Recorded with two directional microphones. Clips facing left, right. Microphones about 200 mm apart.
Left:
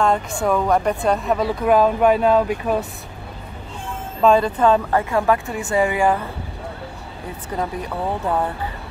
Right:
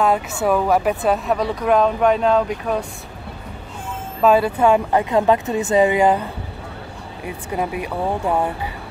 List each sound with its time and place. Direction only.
0.0 s speech: 5° right (ahead or behind)
4.2 s speech: 5° right (ahead or behind)
7.2 s speech: 10° right (ahead or behind)